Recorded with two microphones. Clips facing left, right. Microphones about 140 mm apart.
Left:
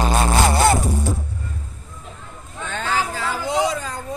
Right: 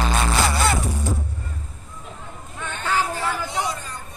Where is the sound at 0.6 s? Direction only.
40° left (ahead or behind).